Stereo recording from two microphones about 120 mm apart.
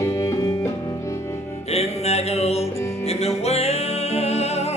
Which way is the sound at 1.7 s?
60° left (ahead or behind).